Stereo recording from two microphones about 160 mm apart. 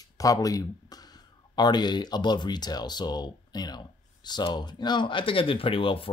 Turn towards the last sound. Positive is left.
turn(degrees=35)  # may be behind; listen again after turning